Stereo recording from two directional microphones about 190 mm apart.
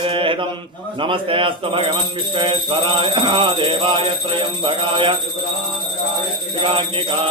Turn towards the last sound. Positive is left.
turn(degrees=-30)  # may be behind; listen again after turning